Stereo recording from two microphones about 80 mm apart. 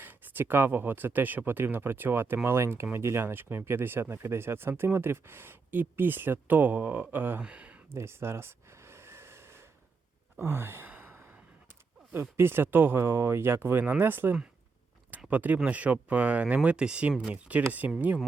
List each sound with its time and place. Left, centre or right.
0.0 s speech: right
7.9 s snort: right
10.4 s sigh: right
10.9 s gasp: right
12.4 s speech: right